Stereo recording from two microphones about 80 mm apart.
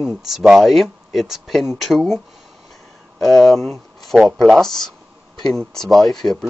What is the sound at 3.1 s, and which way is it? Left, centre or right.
Speech, centre.